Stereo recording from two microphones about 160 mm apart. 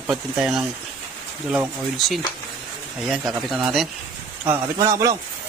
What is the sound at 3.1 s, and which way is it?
Speech, centre (ahead or behind).